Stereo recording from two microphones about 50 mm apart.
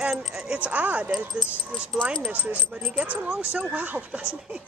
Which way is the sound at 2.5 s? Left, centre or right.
Right.